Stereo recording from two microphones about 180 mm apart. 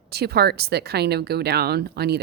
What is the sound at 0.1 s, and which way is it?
Speech, 60° right (ahead or behind).